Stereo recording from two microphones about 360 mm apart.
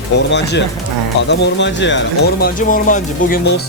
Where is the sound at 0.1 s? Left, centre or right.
Left.